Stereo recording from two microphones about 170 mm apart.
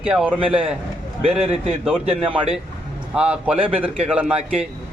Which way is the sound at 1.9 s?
10° right (ahead or behind).